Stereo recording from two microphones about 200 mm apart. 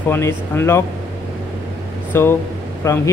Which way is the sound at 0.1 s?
10° left (ahead or behind).